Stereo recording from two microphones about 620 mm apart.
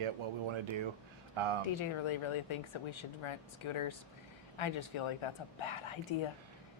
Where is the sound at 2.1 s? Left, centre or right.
Left.